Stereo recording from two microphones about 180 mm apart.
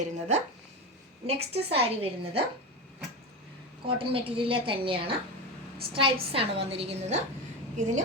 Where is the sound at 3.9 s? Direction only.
30° right (ahead or behind).